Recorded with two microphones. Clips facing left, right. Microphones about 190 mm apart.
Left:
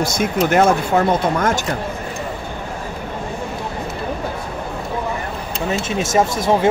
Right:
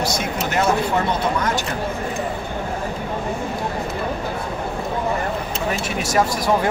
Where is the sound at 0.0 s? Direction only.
50° left (ahead or behind).